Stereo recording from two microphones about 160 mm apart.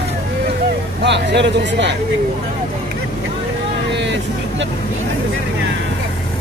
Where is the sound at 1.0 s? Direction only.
90° right.